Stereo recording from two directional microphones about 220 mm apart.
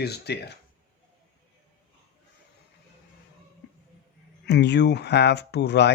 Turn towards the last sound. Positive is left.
turn(degrees=50)  # may be behind; listen again after turning